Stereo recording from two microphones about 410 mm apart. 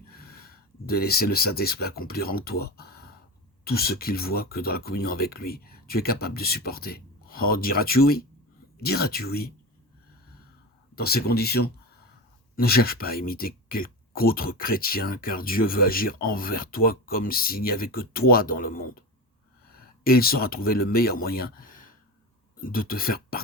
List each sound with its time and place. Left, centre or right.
0.1 s speech: left
10.9 s speech: left